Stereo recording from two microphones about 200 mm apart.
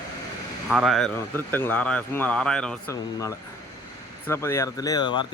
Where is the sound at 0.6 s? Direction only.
Centre (ahead or behind).